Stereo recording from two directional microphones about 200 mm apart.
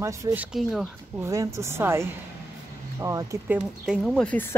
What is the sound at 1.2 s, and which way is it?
Speech, 15° right (ahead or behind).